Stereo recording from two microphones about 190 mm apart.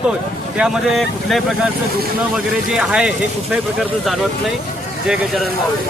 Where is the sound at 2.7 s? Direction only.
5° right (ahead or behind).